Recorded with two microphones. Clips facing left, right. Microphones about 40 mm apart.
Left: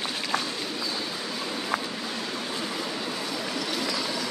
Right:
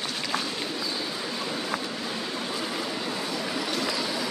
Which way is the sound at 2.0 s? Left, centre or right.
Centre.